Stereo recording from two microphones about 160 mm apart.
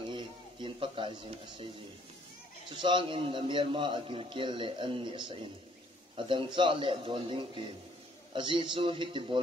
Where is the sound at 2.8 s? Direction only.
30° right (ahead or behind).